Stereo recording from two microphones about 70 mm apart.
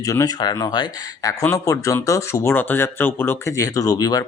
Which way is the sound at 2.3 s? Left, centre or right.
Left.